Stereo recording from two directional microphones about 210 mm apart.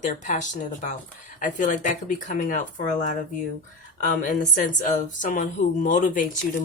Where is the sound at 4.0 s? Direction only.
40° left (ahead or behind).